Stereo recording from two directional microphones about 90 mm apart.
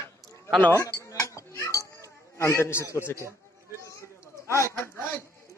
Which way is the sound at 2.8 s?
25° left (ahead or behind).